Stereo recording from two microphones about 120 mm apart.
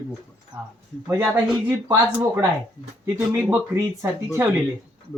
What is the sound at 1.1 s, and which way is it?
Speech, 25° right (ahead or behind).